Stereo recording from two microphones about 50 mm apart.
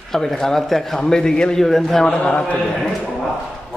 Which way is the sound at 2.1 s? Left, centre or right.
Left.